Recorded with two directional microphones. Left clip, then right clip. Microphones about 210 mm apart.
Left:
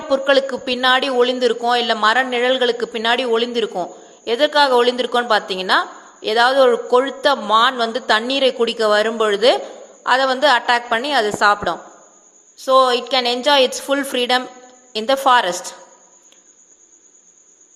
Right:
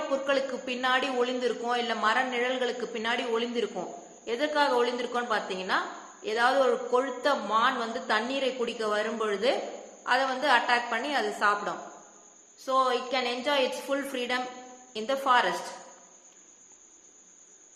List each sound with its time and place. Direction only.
0.1 s a man's voice: 45° left (ahead or behind)